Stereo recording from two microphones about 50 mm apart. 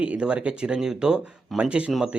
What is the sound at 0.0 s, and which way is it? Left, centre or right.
Speech, right.